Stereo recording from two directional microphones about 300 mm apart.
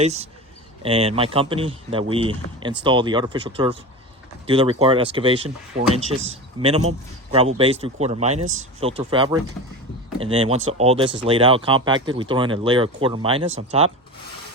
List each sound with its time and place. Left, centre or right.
0.0 s speech: right
6.6 s speech: centre